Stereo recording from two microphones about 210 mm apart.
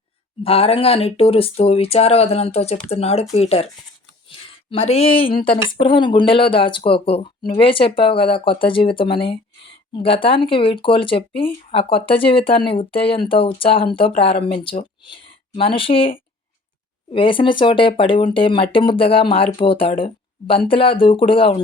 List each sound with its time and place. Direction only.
0.4 s speech: 25° left (ahead or behind)
4.3 s a sound: 25° left (ahead or behind)
5.8 s speech: 25° left (ahead or behind)